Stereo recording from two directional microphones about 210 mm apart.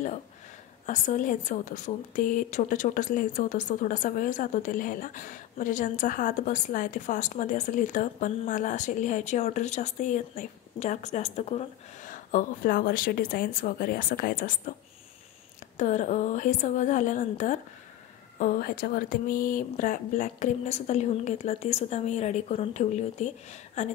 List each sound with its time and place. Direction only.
0.8 s a woman's voice: 35° left (ahead or behind)
15.8 s a woman's voice: 35° left (ahead or behind)
18.4 s a woman's voice: 45° left (ahead or behind)